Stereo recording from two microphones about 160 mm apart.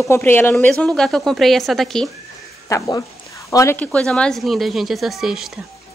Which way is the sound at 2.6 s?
20° left (ahead or behind).